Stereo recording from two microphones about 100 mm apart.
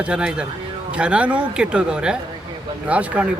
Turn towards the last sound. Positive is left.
turn(degrees=-15)  # may be behind; listen again after turning